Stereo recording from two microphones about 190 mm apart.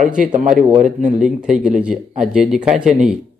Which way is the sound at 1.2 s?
5° right (ahead or behind).